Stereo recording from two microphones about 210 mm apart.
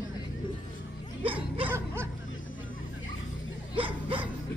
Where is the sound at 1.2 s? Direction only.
25° right (ahead or behind).